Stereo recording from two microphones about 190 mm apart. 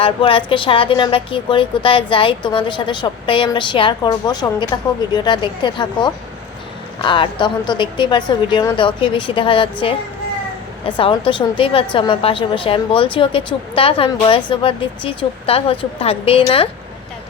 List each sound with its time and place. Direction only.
0.0 s speech: 30° left (ahead or behind)
10.8 s speech: 25° left (ahead or behind)